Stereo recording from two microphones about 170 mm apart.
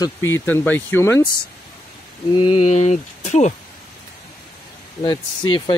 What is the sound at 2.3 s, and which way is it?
Speech, 35° left (ahead or behind).